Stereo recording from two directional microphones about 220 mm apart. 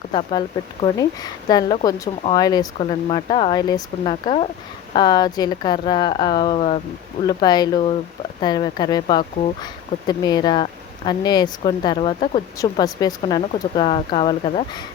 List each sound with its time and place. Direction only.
0.1 s speech: 20° left (ahead or behind)